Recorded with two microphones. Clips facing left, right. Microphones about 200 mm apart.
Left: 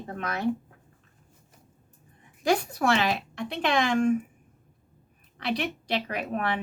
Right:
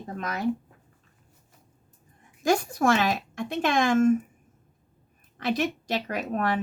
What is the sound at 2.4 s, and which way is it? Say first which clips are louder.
Speech: right 2 dB; 45° right (ahead or behind).